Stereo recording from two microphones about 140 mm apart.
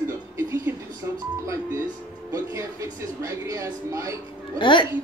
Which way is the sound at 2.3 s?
20° right (ahead or behind).